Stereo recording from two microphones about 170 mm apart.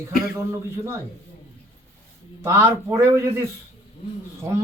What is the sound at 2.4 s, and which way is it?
A man's voice, 15° right (ahead or behind).